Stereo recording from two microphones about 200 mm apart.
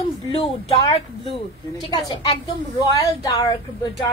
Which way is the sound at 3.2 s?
15° left (ahead or behind).